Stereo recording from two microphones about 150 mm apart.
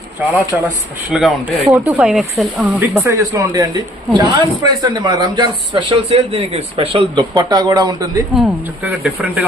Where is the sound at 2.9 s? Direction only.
20° right (ahead or behind).